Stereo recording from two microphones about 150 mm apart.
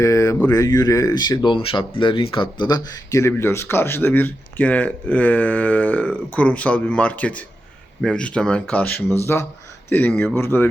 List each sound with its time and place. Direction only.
0.0 s speech: 20° left (ahead or behind)